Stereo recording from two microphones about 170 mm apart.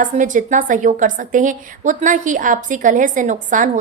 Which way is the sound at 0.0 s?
50° right (ahead or behind).